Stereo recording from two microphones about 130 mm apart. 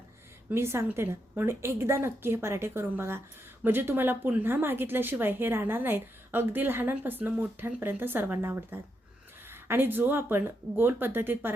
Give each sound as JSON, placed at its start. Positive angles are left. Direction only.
{"t": 0.5, "sound": "a woman's voice", "side_deg": -20}